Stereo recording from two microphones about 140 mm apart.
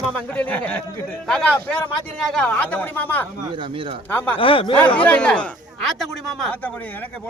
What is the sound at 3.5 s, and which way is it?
Speech, 40° right (ahead or behind).